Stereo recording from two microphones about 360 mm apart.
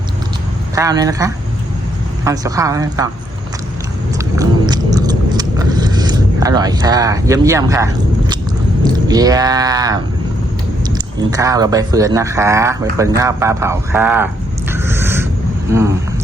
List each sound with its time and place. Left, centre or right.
0.8 s speech: centre
4.4 s vehicle: centre
9.0 s speech: centre
14.7 s a sound: centre
15.7 s speech: centre